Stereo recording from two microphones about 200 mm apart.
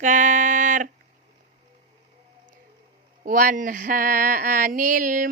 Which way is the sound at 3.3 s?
40° right (ahead or behind).